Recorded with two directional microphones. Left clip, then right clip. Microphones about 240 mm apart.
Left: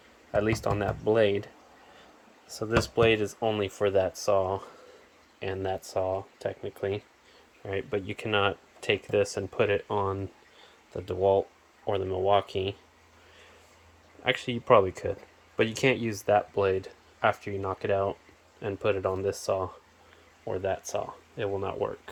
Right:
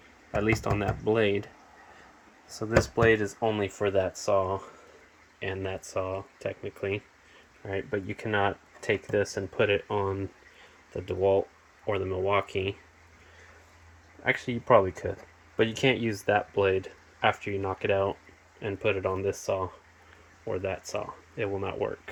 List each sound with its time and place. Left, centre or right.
0.3 s speech: centre
2.5 s speech: centre
2.9 s speech: centre
14.3 s speech: centre